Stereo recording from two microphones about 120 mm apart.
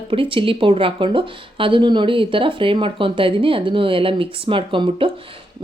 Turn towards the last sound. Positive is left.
turn(degrees=-45)  # may be behind; listen again after turning